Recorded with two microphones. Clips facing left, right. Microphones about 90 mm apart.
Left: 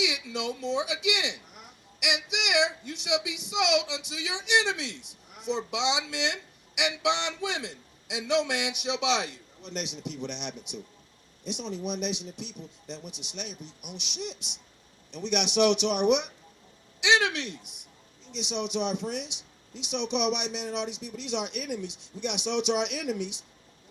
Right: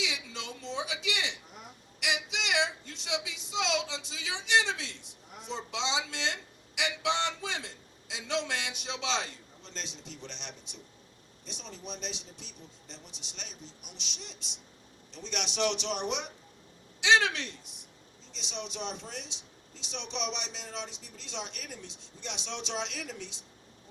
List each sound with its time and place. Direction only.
0.0 s a woman's voice: 15° left (ahead or behind)